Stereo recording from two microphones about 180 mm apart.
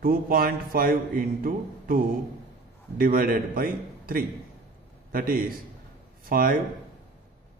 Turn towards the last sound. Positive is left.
turn(degrees=-55)  # may be behind; listen again after turning